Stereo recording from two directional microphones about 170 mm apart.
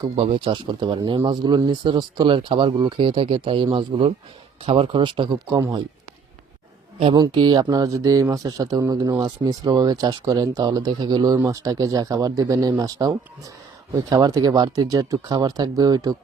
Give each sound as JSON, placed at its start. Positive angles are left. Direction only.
{"t": 0.2, "sound": "speech", "side_deg": -35}
{"t": 7.0, "sound": "speech", "side_deg": -25}